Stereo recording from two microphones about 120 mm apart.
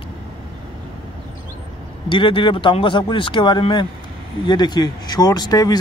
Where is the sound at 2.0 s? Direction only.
45° left (ahead or behind).